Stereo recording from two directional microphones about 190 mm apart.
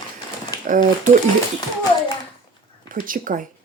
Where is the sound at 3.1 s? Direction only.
45° right (ahead or behind).